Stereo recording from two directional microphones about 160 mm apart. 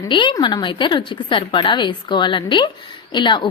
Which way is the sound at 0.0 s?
30° left (ahead or behind).